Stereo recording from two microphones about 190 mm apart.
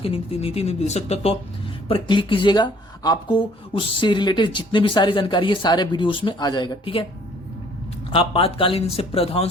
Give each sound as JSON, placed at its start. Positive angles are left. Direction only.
{"t": 0.0, "sound": "speech", "side_deg": 30}
{"t": 8.1, "sound": "speech", "side_deg": 30}